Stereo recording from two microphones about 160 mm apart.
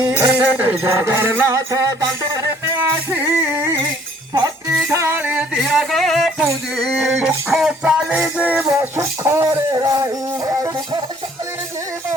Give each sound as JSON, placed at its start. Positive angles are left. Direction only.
{"t": 0.0, "sound": "music", "side_deg": -20}